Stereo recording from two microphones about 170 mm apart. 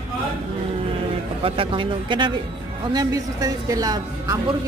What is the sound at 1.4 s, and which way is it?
A woman's voice, 30° right (ahead or behind).